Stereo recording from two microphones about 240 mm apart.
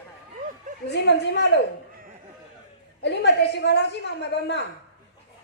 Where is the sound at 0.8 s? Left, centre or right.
Left.